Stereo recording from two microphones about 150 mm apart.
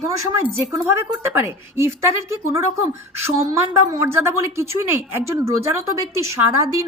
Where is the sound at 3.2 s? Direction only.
20° right (ahead or behind).